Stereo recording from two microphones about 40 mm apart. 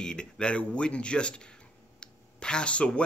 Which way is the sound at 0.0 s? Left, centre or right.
Left.